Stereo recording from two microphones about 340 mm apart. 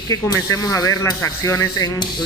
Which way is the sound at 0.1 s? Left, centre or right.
Centre.